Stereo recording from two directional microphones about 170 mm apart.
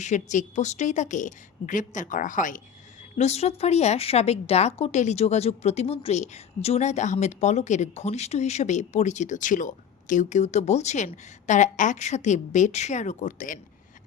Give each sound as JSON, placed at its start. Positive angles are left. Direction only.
{"t": 0.0, "sound": "a woman's voice", "side_deg": 45}
{"t": 3.2, "sound": "a woman's voice", "side_deg": 40}